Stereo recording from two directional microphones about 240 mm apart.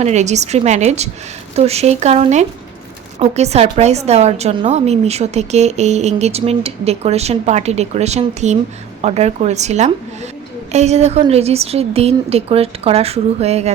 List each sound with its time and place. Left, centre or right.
0.0 s a woman's voice: right